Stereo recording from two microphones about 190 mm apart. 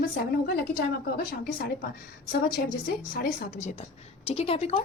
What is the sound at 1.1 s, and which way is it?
Speech, 50° left (ahead or behind).